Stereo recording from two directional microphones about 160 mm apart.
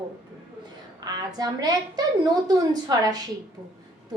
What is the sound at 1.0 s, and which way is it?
A woman's voice, 25° right (ahead or behind).